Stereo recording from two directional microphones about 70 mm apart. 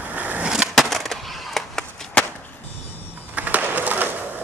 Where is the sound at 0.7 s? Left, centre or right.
Centre.